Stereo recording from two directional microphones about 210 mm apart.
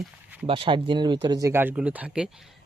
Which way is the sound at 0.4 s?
25° right (ahead or behind).